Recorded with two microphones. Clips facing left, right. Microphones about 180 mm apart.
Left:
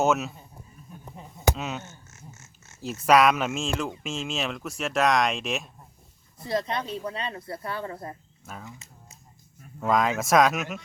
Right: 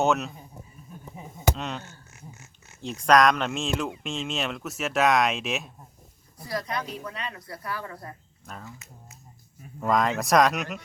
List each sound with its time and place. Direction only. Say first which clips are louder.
0.0 s speech: even; centre (ahead or behind)
1.1 s a sound: left 1 dB; 5° right (ahead or behind)
3.1 s speech: even; 5° left (ahead or behind)
6.4 s speech: left 3 dB; 25° left (ahead or behind)
8.5 s speech: left 1 dB; 5° left (ahead or behind)
9.8 s speech: even; centre (ahead or behind)